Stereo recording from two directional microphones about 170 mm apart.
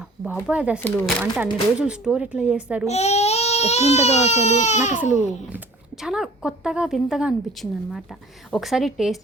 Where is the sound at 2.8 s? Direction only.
40° left (ahead or behind).